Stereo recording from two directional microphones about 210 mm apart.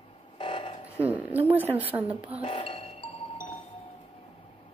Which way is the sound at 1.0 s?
10° right (ahead or behind).